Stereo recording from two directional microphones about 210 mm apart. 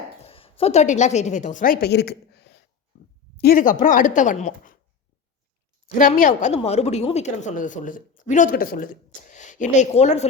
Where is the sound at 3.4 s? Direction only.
40° left (ahead or behind).